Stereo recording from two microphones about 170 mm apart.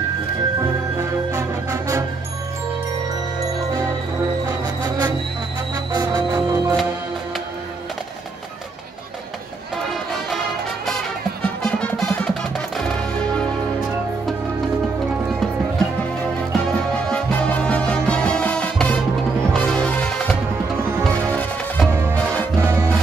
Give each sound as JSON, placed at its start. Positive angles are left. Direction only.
{"t": 0.9, "sound": "music", "side_deg": -20}
{"t": 4.5, "sound": "insect", "side_deg": -25}
{"t": 5.9, "sound": "music", "side_deg": -25}
{"t": 11.6, "sound": "music", "side_deg": 5}
{"t": 16.5, "sound": "music", "side_deg": 5}
{"t": 20.8, "sound": "music", "side_deg": -10}
{"t": 21.1, "sound": "music", "side_deg": 10}
{"t": 22.6, "sound": "music", "side_deg": -20}